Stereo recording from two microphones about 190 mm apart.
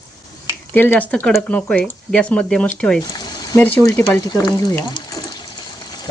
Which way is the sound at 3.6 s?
15° left (ahead or behind).